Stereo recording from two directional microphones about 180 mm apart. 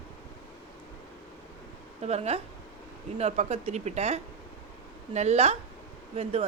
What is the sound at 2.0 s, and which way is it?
Speech, 35° right (ahead or behind).